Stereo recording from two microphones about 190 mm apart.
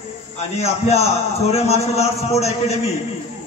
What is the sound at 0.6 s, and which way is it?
A man's voice, 35° left (ahead or behind).